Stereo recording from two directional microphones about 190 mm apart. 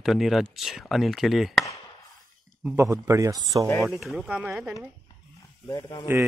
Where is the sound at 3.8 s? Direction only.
Centre (ahead or behind).